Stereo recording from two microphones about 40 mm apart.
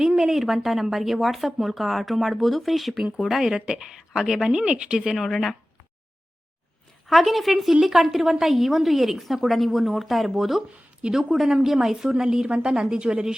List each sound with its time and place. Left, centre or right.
0.3 s a woman's voice: centre
4.5 s speech: right
5.1 s a woman's voice: centre
7.1 s a woman's voice: centre
12.9 s speech: right